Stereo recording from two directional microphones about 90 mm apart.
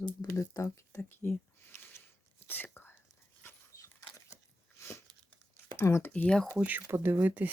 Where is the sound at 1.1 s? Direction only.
25° left (ahead or behind).